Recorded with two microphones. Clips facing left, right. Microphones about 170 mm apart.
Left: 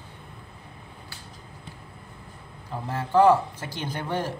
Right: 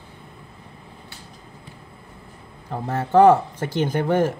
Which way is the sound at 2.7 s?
60° right (ahead or behind).